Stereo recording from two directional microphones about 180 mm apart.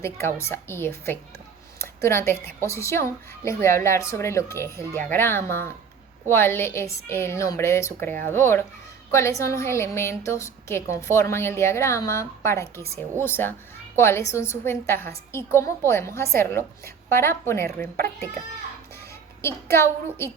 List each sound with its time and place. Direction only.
0.0 s speech: 15° left (ahead or behind)
19.4 s speech: 15° left (ahead or behind)